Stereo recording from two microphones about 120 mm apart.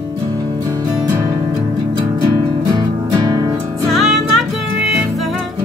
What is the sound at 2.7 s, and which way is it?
Music, 30° right (ahead or behind).